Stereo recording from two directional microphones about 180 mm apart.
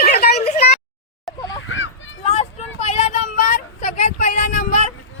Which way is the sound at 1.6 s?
90° left.